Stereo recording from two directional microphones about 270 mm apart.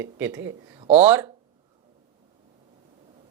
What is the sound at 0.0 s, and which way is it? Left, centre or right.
Speech, centre.